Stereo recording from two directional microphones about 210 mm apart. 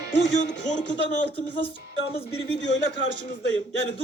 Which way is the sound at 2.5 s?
60° left (ahead or behind).